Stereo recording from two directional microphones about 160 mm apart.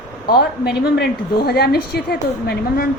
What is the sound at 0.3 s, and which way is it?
A woman's voice, 80° left.